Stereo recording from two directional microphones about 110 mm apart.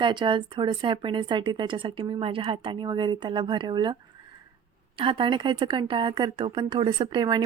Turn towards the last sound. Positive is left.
turn(degrees=-45)  # may be behind; listen again after turning